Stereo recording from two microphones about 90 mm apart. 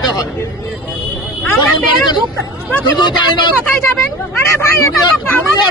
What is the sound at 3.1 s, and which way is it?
Speech, 60° left (ahead or behind).